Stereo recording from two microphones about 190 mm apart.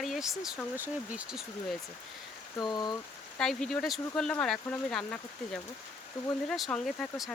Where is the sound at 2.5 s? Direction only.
20° left (ahead or behind).